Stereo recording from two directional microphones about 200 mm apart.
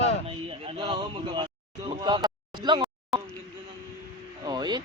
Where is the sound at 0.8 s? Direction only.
25° right (ahead or behind).